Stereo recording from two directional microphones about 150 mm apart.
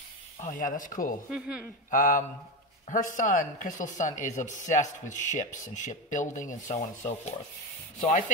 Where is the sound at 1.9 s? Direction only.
65° left (ahead or behind).